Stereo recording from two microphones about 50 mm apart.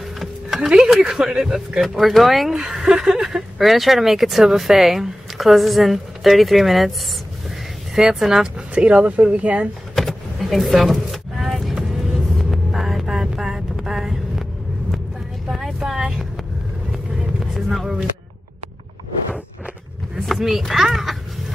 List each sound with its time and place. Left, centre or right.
0.6 s speech: centre
7.9 s speech: centre
8.7 s speech: right
9.9 s vehicle: centre
15.5 s vehicle: centre
17.6 s a sound: centre
20.2 s speech: centre